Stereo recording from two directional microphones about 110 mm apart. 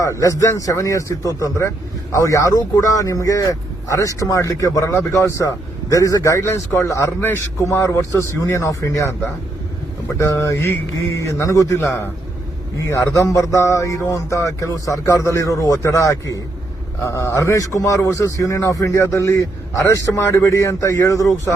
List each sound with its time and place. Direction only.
0.0 s a man's voice: 30° left (ahead or behind)
10.2 s a man's voice: 25° left (ahead or behind)